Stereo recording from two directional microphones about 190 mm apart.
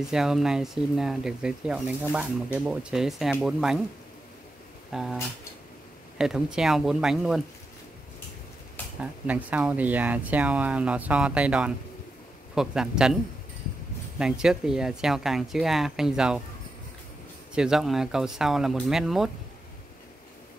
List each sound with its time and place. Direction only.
0.1 s speech: centre (ahead or behind)
4.9 s speech: centre (ahead or behind)
9.0 s speech: 5° right (ahead or behind)
17.6 s speech: 5° right (ahead or behind)